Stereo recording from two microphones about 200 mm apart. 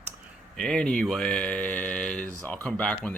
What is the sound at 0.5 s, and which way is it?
Speech, 5° left (ahead or behind).